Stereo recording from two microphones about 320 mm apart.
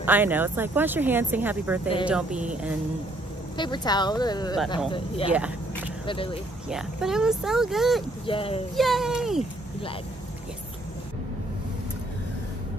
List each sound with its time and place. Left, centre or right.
0.0 s speech: centre
3.5 s speech: centre
5.3 s speech: centre
6.0 s speech: centre
6.7 s speech: centre
8.3 s speech: centre
8.7 s speech: centre